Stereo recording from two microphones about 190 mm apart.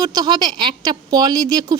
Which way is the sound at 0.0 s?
20° right (ahead or behind).